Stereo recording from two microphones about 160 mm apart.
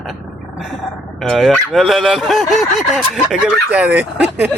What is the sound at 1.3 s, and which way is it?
Speech, centre (ahead or behind).